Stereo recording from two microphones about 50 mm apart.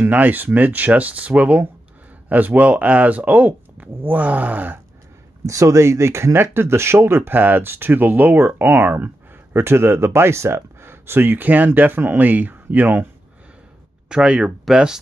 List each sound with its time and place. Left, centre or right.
0.0 s speech: right
5.4 s speech: right
6.4 s speech: right
14.0 s speech: centre